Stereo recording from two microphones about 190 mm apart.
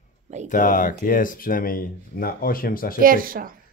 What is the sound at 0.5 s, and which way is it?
Speech, 45° left (ahead or behind).